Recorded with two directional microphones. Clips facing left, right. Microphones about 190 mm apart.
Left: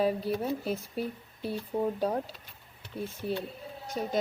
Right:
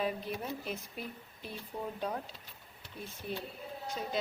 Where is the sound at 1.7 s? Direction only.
20° left (ahead or behind).